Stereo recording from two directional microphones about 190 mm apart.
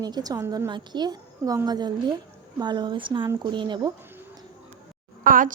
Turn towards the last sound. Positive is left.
turn(degrees=-45)  # may be behind; listen again after turning